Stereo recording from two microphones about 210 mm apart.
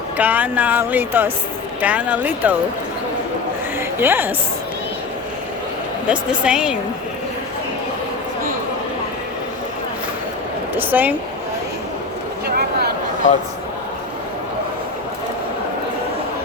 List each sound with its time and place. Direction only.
0.2 s speech: 10° right (ahead or behind)
3.8 s a woman's voice: 10° right (ahead or behind)
6.1 s speech: 5° right (ahead or behind)
10.8 s speech: 10° right (ahead or behind)
12.5 s a sound: 50° right (ahead or behind)